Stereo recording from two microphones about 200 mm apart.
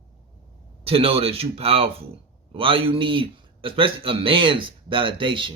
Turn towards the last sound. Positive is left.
turn(degrees=-25)  # may be behind; listen again after turning